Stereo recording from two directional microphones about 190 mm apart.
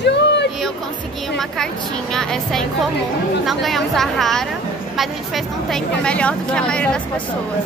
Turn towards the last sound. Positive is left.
turn(degrees=5)  # may be behind; listen again after turning